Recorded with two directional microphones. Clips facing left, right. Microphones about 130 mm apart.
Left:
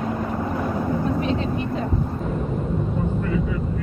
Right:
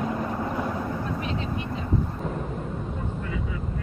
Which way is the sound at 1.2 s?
35° left (ahead or behind).